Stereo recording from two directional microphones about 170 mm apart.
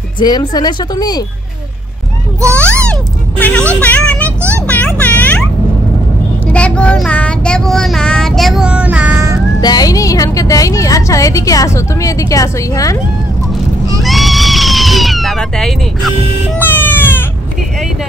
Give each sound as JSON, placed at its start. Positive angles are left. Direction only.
{"t": 0.2, "sound": "a woman's voice", "side_deg": 25}
{"t": 2.5, "sound": "a sound", "side_deg": 5}
{"t": 3.8, "sound": "speech", "side_deg": 10}
{"t": 4.6, "sound": "music", "side_deg": 10}
{"t": 6.5, "sound": "child singing", "side_deg": 5}
{"t": 9.6, "sound": "a woman's voice", "side_deg": 25}
{"t": 14.0, "sound": "cat", "side_deg": 0}
{"t": 16.5, "sound": "cat", "side_deg": 10}